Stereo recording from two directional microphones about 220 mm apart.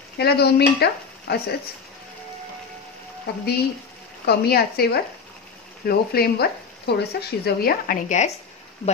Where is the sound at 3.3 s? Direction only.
45° left (ahead or behind).